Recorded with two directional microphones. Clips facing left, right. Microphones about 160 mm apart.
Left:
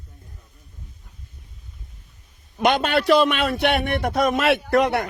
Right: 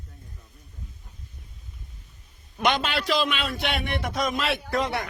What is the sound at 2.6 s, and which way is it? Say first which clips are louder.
A man's voice: left 6 dB; 50° left (ahead or behind).